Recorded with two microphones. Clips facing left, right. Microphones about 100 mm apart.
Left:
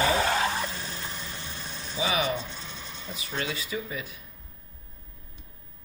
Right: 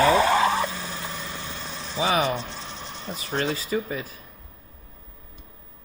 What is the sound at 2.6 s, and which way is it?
Speech, 40° right (ahead or behind).